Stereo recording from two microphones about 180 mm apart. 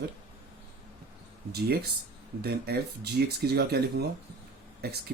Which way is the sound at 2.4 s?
60° right (ahead or behind).